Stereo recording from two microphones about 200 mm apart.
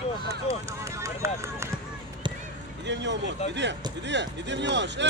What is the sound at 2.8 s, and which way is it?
Vehicle, 60° right (ahead or behind).